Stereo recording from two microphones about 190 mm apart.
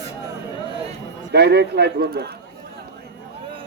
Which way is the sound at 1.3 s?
60° right (ahead or behind).